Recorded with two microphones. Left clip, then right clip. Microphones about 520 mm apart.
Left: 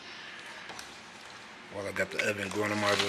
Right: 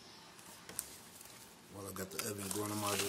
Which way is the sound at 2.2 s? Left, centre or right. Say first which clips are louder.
Left 11 dB; right.